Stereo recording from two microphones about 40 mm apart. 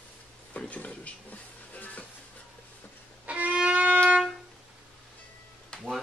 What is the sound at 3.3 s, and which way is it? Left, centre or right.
Violin, right.